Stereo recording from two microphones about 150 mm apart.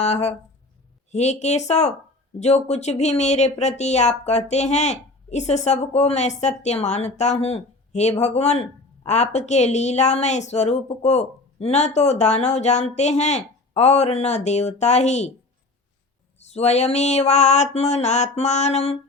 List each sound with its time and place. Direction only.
0.0 s a woman's voice: 45° left (ahead or behind)
16.5 s a woman's voice: 45° left (ahead or behind)